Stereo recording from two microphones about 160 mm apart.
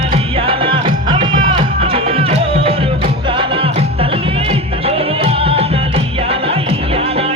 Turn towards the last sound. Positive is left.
turn(degrees=-35)  # may be behind; listen again after turning